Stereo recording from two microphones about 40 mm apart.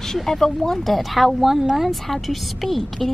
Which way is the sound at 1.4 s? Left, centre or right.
Centre.